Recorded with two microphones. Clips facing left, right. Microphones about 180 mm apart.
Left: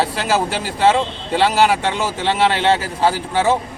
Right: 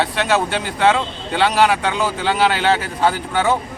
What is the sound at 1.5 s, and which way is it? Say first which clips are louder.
Speech: even; 30° left (ahead or behind).